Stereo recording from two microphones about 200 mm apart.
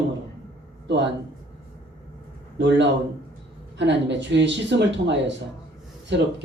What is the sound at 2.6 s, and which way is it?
A man's voice, 60° right (ahead or behind).